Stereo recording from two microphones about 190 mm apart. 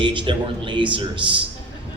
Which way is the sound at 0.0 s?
25° right (ahead or behind).